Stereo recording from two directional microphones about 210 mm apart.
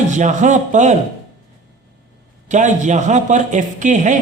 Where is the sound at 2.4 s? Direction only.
35° right (ahead or behind).